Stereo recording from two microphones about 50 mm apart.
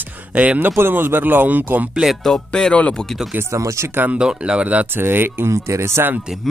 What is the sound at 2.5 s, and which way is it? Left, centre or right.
Speech, centre.